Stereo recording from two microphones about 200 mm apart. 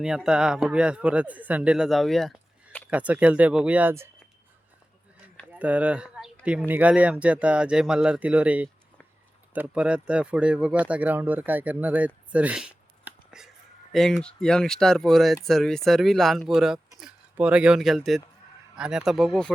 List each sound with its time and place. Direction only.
0.0 s speech: 5° right (ahead or behind)
2.9 s speech: 5° right (ahead or behind)
5.5 s a sound: 5° right (ahead or behind)
6.7 s speech: 5° right (ahead or behind)